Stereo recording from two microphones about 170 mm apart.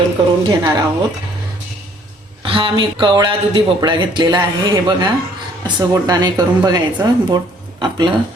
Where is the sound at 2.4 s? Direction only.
30° right (ahead or behind).